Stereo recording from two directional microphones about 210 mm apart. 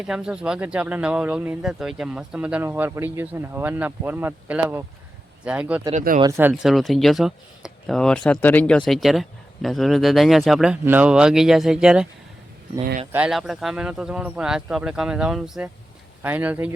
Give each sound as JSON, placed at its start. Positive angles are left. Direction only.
{"t": 0.0, "sound": "speech", "side_deg": -5}
{"t": 5.9, "sound": "speech", "side_deg": -40}
{"t": 6.1, "sound": "speech", "side_deg": -15}
{"t": 6.5, "sound": "speech", "side_deg": 0}
{"t": 13.1, "sound": "speech", "side_deg": -5}